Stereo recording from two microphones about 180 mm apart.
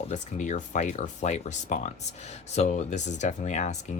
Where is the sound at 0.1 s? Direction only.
45° left (ahead or behind).